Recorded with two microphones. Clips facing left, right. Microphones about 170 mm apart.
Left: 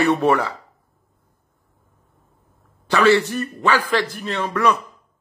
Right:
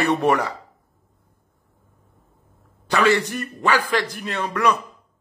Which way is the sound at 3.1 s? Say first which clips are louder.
Left 4 dB; 15° right (ahead or behind).